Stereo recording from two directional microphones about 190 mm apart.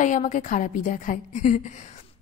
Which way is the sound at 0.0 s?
40° left (ahead or behind).